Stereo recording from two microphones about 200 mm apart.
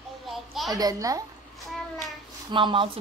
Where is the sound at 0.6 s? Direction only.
15° right (ahead or behind).